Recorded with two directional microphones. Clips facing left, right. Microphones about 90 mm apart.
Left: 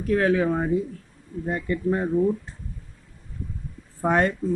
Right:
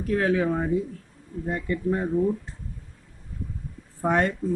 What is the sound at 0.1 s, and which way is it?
Speech, 70° left (ahead or behind).